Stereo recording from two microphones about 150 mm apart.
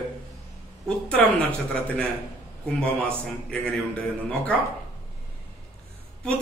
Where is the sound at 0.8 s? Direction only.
5° left (ahead or behind).